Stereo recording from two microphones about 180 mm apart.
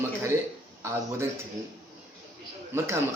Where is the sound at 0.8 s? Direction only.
15° right (ahead or behind).